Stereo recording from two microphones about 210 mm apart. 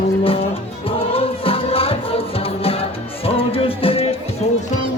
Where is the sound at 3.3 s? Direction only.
25° left (ahead or behind).